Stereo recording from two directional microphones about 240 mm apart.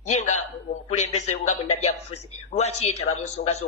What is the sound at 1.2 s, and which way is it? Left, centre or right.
Speech, left.